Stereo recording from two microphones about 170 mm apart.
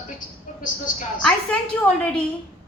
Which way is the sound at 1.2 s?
5° left (ahead or behind).